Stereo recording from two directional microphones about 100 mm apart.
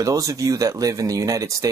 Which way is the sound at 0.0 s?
35° right (ahead or behind).